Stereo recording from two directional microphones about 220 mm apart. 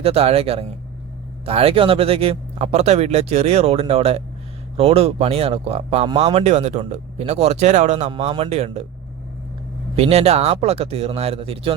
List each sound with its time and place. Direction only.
0.0 s speech: 25° right (ahead or behind)
9.9 s speech: 30° right (ahead or behind)